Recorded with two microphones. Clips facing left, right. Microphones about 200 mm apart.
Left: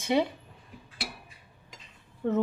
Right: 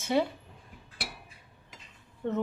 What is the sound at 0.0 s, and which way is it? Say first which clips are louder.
Speech: left 1 dB; 15° left (ahead or behind).